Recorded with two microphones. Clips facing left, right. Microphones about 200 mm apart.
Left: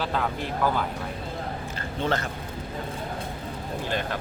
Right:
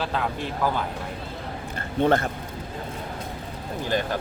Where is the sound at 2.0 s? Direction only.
55° right (ahead or behind).